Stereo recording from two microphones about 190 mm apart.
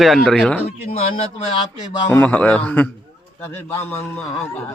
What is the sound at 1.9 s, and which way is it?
A man's voice, 15° left (ahead or behind).